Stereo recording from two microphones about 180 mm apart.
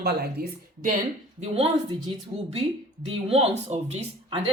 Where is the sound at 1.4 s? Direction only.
35° right (ahead or behind).